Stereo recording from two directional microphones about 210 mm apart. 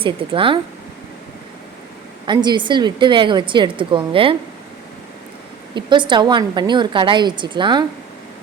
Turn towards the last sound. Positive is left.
turn(degrees=-20)  # may be behind; listen again after turning